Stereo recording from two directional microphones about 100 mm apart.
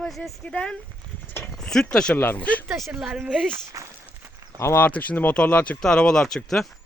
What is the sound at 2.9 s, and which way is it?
Speech, 10° right (ahead or behind).